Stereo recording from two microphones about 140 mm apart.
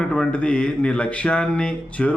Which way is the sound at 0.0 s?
5° left (ahead or behind).